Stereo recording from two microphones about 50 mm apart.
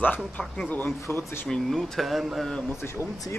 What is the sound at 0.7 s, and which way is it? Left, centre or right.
Speech, left.